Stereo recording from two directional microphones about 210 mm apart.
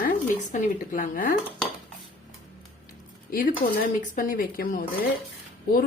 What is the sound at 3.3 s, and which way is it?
Speech, 45° left (ahead or behind).